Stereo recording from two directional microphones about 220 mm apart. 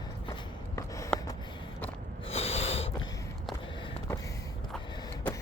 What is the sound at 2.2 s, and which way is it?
Snort, 30° left (ahead or behind).